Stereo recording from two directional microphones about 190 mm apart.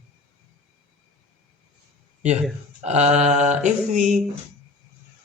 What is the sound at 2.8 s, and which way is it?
Speech, 35° right (ahead or behind).